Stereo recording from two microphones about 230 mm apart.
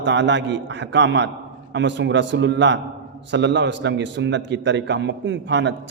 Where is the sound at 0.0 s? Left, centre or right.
Right.